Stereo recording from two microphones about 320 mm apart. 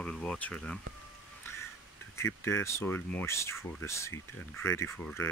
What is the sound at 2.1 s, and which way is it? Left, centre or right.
Speech, centre.